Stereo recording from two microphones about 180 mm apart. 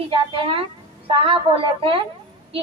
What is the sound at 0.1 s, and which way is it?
Speech, 30° right (ahead or behind).